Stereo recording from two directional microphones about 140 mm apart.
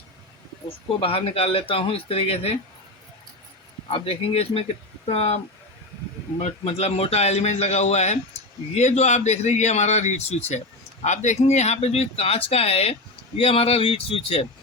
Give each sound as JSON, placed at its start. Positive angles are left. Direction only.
{"t": 0.9, "sound": "speech", "side_deg": 45}
{"t": 3.8, "sound": "speech", "side_deg": 45}
{"t": 6.4, "sound": "a man's voice", "side_deg": 50}